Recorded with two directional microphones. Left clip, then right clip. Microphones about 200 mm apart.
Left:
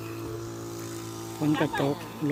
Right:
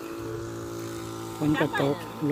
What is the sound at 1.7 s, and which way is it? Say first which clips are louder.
Speech: right 2 dB; 30° left (ahead or behind).